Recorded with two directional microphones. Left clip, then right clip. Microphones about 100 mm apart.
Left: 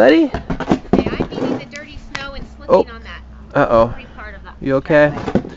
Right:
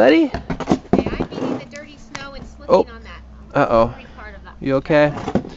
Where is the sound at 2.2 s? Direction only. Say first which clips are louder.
Left 1 dB; 20° right (ahead or behind).